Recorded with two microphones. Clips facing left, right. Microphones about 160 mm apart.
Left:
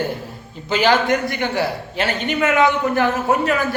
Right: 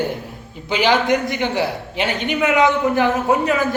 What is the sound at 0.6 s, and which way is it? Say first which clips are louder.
A man's voice: even; 15° right (ahead or behind).